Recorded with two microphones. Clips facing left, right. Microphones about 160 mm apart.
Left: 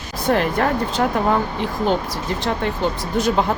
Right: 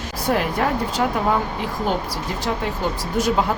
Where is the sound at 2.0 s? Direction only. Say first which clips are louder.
Left 2 dB; 10° right (ahead or behind).